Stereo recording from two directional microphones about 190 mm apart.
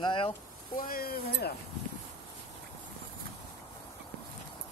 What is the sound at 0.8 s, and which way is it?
Speech, 50° left (ahead or behind).